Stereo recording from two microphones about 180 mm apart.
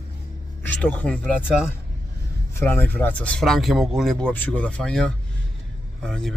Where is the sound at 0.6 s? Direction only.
10° left (ahead or behind).